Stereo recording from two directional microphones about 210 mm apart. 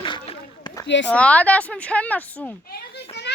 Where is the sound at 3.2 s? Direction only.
55° left (ahead or behind).